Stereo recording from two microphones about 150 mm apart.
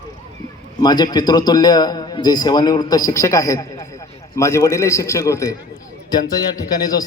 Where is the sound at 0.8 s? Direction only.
30° left (ahead or behind).